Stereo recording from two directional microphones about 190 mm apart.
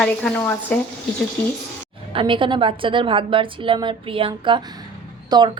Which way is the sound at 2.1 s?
25° right (ahead or behind).